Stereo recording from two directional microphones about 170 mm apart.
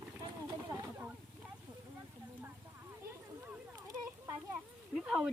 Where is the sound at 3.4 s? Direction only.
20° right (ahead or behind).